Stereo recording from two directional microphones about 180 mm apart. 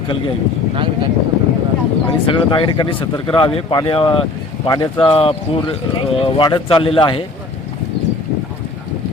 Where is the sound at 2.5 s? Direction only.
25° left (ahead or behind).